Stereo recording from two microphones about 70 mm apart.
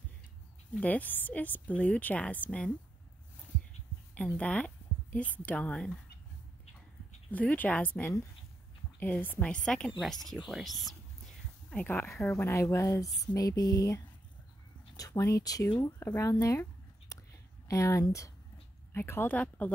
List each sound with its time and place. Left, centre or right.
0.7 s speech: left
4.1 s a sound: centre
5.4 s a woman's voice: centre
7.2 s speech: left
9.5 s a woman's voice: centre
11.7 s speech: left
12.3 s speech: left
15.0 s speech: left
15.6 s speech: left
17.1 s whispering: left
17.6 s speech: left
18.9 s speech: left
19.3 s speech: centre